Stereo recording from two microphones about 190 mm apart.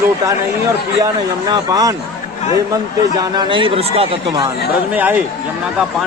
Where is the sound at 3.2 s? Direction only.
25° right (ahead or behind).